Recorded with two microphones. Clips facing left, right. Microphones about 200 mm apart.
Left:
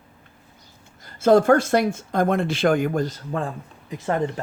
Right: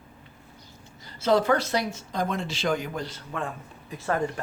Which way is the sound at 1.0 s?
50° left (ahead or behind).